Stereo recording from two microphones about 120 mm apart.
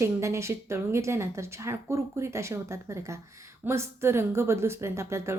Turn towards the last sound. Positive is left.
turn(degrees=-25)  # may be behind; listen again after turning